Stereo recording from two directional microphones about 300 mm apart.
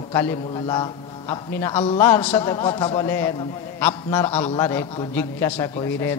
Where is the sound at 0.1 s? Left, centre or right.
Centre.